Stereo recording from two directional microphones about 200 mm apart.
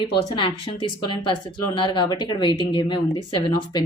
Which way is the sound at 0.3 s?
25° left (ahead or behind).